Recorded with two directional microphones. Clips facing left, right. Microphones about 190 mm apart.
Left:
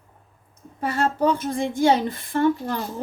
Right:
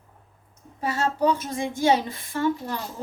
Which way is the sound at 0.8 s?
55° left (ahead or behind).